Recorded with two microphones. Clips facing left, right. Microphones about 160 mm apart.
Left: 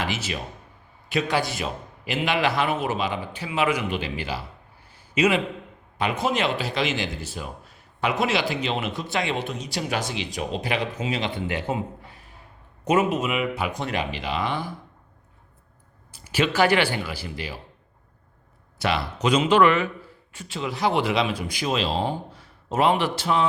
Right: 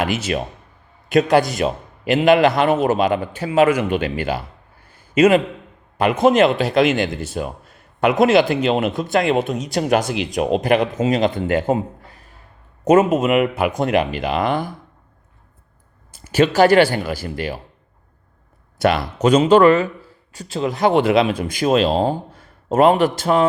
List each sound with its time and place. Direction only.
0.0 s speech: 60° right (ahead or behind)
1.1 s a man's voice: 45° right (ahead or behind)
4.9 s a sound: 50° right (ahead or behind)
6.0 s a man's voice: 50° right (ahead or behind)
12.8 s a man's voice: 45° right (ahead or behind)
16.1 s a man's voice: 45° right (ahead or behind)
18.8 s a man's voice: 50° right (ahead or behind)